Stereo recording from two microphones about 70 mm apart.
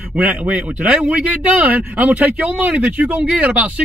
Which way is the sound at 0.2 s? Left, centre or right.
Centre.